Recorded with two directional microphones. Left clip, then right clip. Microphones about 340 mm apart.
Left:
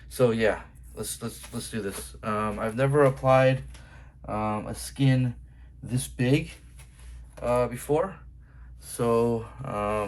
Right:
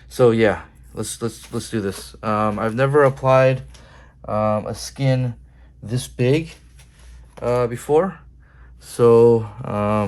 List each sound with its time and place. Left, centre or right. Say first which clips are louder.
0.1 s speech: right 8 dB; centre
7.4 s speech: right 5 dB; right